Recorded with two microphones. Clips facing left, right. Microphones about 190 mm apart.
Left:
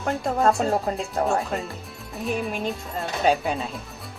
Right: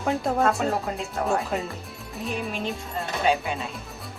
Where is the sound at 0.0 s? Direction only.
Centre (ahead or behind).